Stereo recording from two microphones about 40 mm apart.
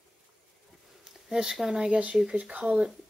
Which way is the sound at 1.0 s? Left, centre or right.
Centre.